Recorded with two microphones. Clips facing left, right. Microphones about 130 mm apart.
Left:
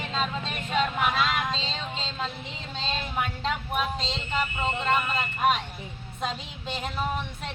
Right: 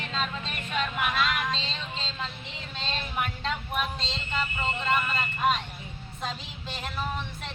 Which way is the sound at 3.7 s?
15° left (ahead or behind).